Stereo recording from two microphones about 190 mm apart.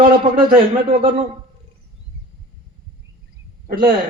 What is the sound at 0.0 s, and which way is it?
Speech, 50° right (ahead or behind).